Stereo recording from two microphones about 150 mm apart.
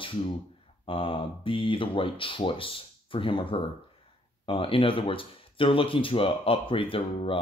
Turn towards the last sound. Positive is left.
turn(degrees=35)  # may be behind; listen again after turning